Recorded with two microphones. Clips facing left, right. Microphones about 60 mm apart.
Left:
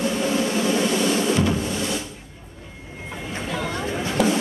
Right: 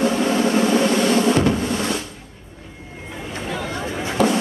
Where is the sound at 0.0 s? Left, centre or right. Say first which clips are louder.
Right 4 dB; right.